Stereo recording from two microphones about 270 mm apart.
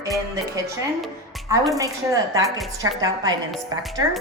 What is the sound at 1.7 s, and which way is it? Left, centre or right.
A woman's voice, centre.